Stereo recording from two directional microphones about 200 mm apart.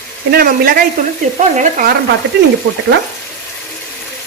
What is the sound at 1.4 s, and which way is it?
Sizzle, 40° right (ahead or behind).